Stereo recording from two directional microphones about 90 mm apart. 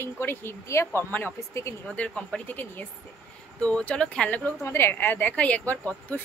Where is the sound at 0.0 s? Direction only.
25° left (ahead or behind).